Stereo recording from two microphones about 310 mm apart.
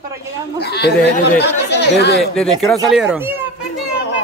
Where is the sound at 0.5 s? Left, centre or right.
Left.